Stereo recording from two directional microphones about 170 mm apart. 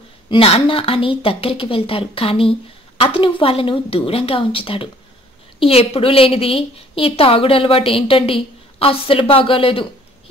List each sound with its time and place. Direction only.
0.3 s a woman's voice: 35° left (ahead or behind)